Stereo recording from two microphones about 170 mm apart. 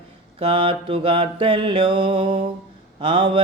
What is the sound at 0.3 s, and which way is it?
Mantra, 30° right (ahead or behind).